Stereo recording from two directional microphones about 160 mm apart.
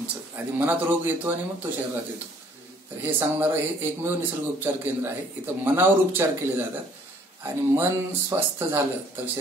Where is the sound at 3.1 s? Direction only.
15° right (ahead or behind).